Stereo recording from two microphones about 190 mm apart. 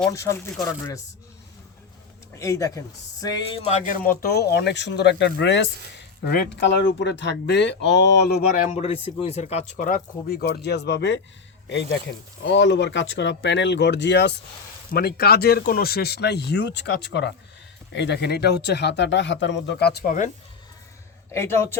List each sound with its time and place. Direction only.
0.1 s speech: 15° left (ahead or behind)
2.4 s speech: 15° left (ahead or behind); by 8.4 s 60° left (ahead or behind)
8.5 s speech: 35° left (ahead or behind); by 20.1 s 60° left (ahead or behind)
21.3 s speech: 15° left (ahead or behind)